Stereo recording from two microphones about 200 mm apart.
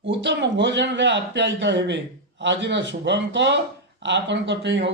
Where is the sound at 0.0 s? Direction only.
60° right (ahead or behind).